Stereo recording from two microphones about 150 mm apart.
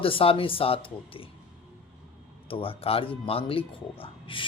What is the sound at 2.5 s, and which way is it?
A man's voice, 35° left (ahead or behind).